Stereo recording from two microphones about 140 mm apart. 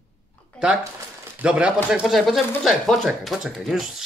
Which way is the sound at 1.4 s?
10° right (ahead or behind).